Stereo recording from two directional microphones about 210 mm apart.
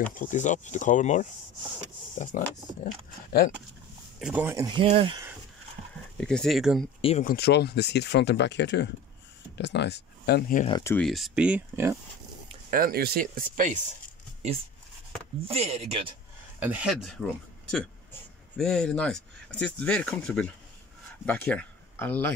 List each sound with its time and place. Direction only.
0.1 s speech: 40° left (ahead or behind)
4.2 s speech: 5° right (ahead or behind)
4.8 s chopping: 25° right (ahead or behind)
6.1 s speech: 5° left (ahead or behind)
7.0 s speech: 30° left (ahead or behind)
7.2 s speech: 50° left (ahead or behind)
10.8 s speech: 10° left (ahead or behind)
11.1 s speech: centre (ahead or behind)
12.7 s speech: 45° right (ahead or behind)
15.4 s chopping: 30° right (ahead or behind)
16.5 s speech: 5° right (ahead or behind); by 22.3 s 10° left (ahead or behind)